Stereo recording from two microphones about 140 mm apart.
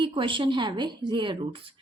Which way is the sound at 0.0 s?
35° right (ahead or behind).